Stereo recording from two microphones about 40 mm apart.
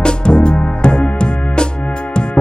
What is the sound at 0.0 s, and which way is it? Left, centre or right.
Music, left.